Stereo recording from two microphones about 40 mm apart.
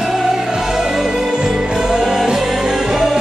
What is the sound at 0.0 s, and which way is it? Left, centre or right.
Music, centre.